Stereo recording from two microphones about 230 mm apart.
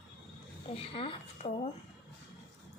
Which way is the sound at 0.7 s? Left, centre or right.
Left.